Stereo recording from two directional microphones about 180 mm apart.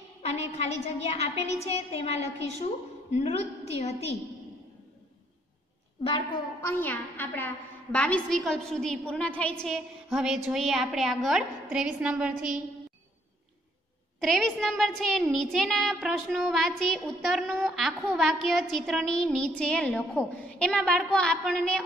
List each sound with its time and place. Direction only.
0.2 s a woman's voice: 35° left (ahead or behind)
6.6 s a woman's voice: 10° left (ahead or behind); by 12.5 s 5° right (ahead or behind)
14.2 s a woman's voice: centre (ahead or behind)